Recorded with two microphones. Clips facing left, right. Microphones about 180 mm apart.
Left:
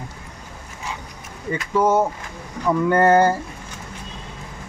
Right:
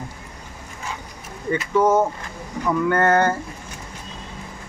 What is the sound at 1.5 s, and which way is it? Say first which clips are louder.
Speech: right 1 dB; 5° left (ahead or behind).